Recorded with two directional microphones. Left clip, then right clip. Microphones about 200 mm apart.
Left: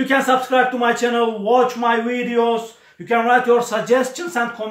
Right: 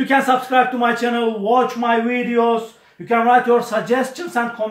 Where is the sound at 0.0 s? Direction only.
Centre (ahead or behind).